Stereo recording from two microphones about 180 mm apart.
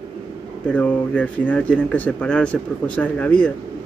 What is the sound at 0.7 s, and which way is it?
Speech, 10° left (ahead or behind).